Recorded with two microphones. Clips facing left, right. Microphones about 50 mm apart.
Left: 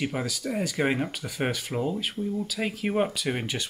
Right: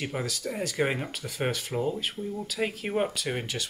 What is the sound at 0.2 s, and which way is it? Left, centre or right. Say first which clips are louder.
Speech: left 2 dB; centre.